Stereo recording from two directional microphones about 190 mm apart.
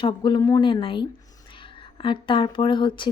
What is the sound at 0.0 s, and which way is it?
A woman's voice, 25° left (ahead or behind).